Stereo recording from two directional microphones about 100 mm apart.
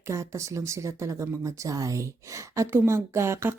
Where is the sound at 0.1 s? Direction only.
30° right (ahead or behind).